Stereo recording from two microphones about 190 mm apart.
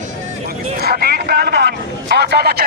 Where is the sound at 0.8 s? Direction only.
55° right (ahead or behind).